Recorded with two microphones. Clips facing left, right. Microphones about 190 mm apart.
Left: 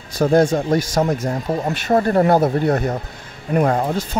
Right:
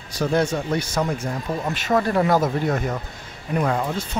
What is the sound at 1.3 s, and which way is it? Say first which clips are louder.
Speech: left 5 dB; 35° left (ahead or behind).